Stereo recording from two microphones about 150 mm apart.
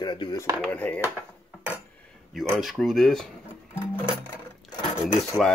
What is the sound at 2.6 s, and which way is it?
Speech, centre (ahead or behind).